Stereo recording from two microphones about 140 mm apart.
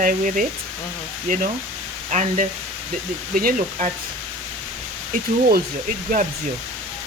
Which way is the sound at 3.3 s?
90° right.